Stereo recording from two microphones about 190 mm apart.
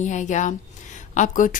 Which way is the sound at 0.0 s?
40° left (ahead or behind).